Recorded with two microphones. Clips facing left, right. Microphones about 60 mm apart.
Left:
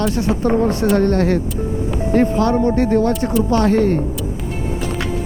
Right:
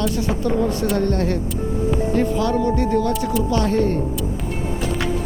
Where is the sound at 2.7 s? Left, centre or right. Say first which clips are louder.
Left 4 dB; left.